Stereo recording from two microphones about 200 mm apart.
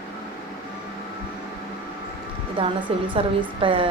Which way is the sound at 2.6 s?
30° right (ahead or behind).